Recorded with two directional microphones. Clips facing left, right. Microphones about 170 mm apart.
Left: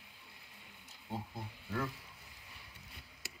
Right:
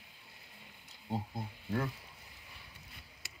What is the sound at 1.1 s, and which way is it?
Speech, 30° right (ahead or behind).